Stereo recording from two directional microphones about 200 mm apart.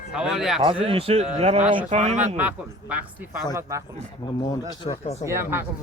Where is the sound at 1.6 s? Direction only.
5° right (ahead or behind).